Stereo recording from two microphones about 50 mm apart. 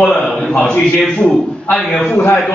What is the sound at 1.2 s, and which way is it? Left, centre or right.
Speech, left.